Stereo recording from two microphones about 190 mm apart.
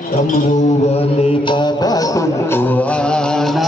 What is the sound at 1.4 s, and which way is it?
Music, 25° left (ahead or behind).